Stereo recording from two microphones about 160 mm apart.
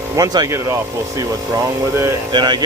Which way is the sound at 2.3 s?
30° right (ahead or behind).